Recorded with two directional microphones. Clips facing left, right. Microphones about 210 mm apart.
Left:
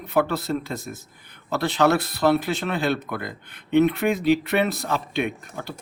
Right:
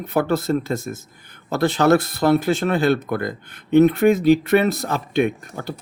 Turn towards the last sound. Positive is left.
turn(degrees=-45)  # may be behind; listen again after turning